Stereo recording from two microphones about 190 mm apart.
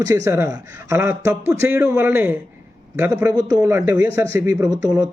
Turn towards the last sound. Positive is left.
turn(degrees=-20)  # may be behind; listen again after turning